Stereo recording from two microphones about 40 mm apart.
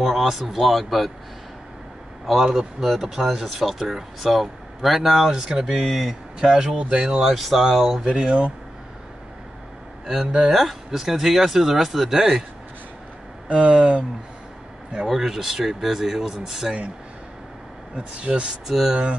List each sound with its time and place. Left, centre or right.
0.0 s speech: centre
2.2 s speech: centre
5.3 s speech: centre
8.0 s speech: right
10.5 s speech: centre
13.5 s speech: right
15.0 s speech: centre
17.9 s speech: right
18.7 s speech: centre